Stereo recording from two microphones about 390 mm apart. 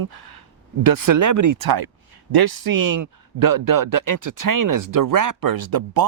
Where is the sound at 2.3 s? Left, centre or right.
Right.